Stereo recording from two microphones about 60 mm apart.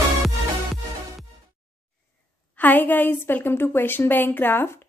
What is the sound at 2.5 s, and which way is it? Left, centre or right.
A woman's voice, left.